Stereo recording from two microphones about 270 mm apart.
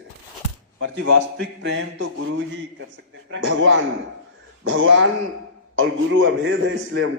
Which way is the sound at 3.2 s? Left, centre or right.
Right.